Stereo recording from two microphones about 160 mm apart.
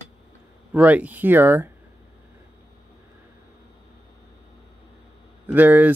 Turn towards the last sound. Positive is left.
turn(degrees=-10)  # may be behind; listen again after turning